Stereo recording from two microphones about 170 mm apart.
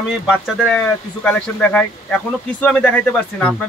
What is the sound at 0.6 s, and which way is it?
Speech, 5° left (ahead or behind).